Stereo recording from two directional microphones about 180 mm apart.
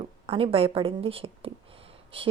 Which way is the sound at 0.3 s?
30° right (ahead or behind).